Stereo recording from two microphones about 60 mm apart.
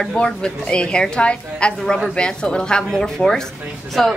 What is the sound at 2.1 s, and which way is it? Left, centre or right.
A woman's voice, centre.